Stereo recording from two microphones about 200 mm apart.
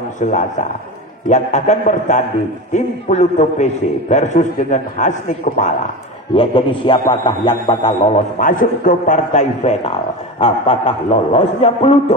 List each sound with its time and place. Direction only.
0.2 s a man's voice: 40° left (ahead or behind)
6.3 s a man's voice: 25° left (ahead or behind)
8.4 s a man's voice: 40° left (ahead or behind)